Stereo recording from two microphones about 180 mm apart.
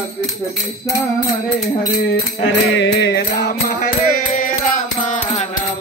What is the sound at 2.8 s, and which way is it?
Music, 85° left.